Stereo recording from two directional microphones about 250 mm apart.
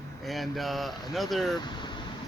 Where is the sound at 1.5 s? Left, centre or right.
Centre.